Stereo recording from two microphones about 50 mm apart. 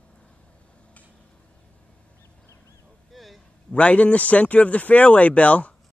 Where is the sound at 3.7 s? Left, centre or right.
Left.